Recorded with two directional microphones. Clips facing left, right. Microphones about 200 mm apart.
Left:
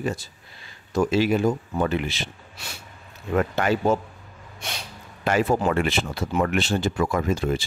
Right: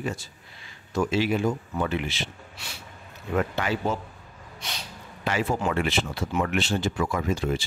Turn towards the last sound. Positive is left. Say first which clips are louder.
# left 3 dB
turn(degrees=45)  # may be behind; listen again after turning